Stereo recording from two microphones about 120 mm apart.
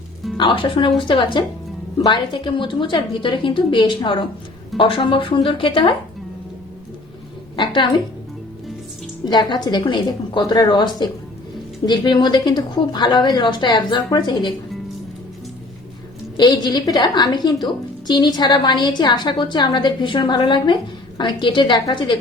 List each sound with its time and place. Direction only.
0.3 s a woman's voice: 45° left (ahead or behind)
7.5 s a sound: 40° left (ahead or behind)
9.2 s a woman's voice: 40° left (ahead or behind)
16.4 s a woman's voice: 40° left (ahead or behind)